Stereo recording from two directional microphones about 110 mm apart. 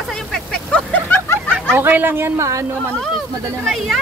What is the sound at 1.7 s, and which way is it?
Speech, 20° right (ahead or behind).